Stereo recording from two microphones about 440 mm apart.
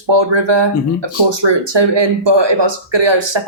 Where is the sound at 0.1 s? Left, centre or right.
Right.